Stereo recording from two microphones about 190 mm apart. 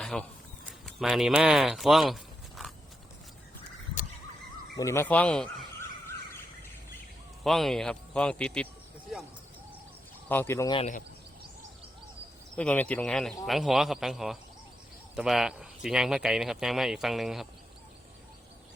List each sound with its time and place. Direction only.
0.0 s a sound: 5° left (ahead or behind)
0.9 s speech: centre (ahead or behind)
4.8 s speech: 15° left (ahead or behind)
7.4 s speech: centre (ahead or behind)
10.2 s speech: 10° left (ahead or behind)
10.8 s speech: 40° left (ahead or behind)
12.5 s speech: 10° left (ahead or behind)